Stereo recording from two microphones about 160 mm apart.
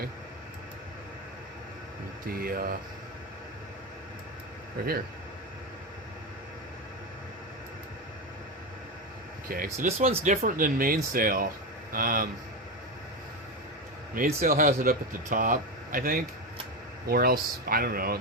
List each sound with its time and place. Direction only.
2.2 s speech: 65° right (ahead or behind)
4.8 s speech: 65° right (ahead or behind)
9.5 s speech: 65° right (ahead or behind)
9.8 s speech: 40° right (ahead or behind)
10.3 s speech: 55° right (ahead or behind)
14.4 s speech: 60° right (ahead or behind)